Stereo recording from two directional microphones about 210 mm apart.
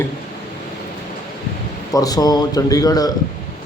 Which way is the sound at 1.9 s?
15° left (ahead or behind).